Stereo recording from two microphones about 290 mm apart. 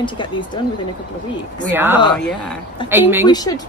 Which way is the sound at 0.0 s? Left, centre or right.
Centre.